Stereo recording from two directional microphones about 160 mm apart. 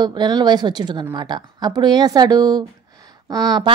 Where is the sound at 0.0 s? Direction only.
25° right (ahead or behind).